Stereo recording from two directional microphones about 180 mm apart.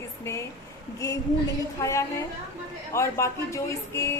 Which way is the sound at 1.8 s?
15° left (ahead or behind).